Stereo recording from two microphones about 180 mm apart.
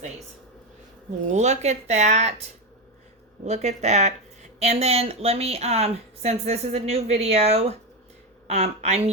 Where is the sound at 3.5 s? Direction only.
40° right (ahead or behind).